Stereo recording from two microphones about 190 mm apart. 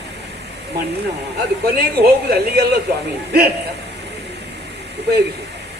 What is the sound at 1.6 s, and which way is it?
A man's voice, 55° right (ahead or behind).